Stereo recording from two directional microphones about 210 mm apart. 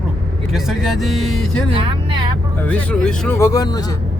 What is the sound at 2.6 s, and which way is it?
Speech, 5° left (ahead or behind).